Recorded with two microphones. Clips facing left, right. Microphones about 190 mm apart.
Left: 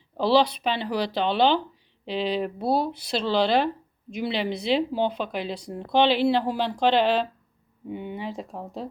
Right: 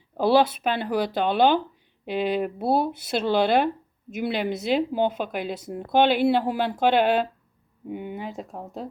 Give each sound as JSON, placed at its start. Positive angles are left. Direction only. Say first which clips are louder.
{"t": 0.3, "sound": "speech", "louder": "even", "side_deg": -5}
{"t": 0.7, "sound": "a woman's voice", "louder": "right 2 dB", "side_deg": -50}
{"t": 5.5, "sound": "speech", "louder": "right 2 dB", "side_deg": -5}
{"t": 5.8, "sound": "a woman's voice", "louder": "right 1 dB", "side_deg": -50}
{"t": 6.2, "sound": "speech", "louder": "right 1 dB", "side_deg": -5}
{"t": 6.9, "sound": "a woman's voice", "louder": "right 1 dB", "side_deg": -55}
{"t": 7.9, "sound": "speech", "louder": "even", "side_deg": -5}